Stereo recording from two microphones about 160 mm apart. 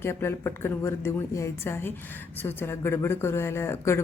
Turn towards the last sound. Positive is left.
turn(degrees=15)  # may be behind; listen again after turning